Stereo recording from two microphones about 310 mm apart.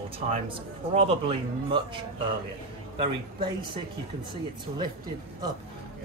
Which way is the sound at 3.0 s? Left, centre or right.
Centre.